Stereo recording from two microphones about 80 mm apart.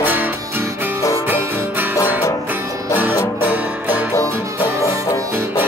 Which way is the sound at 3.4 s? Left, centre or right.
Centre.